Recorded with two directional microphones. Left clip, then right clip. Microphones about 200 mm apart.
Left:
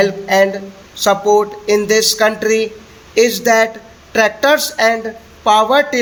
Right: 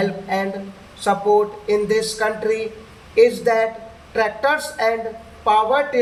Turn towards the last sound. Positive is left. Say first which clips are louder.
# left 5 dB
turn(degrees=55)  # may be behind; listen again after turning